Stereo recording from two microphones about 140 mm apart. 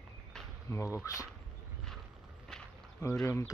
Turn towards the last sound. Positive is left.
turn(degrees=20)  # may be behind; listen again after turning